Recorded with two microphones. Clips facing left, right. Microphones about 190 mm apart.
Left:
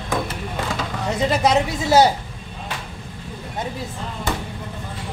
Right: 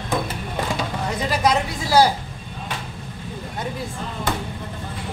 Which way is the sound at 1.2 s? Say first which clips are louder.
Left 3 dB; 25° left (ahead or behind).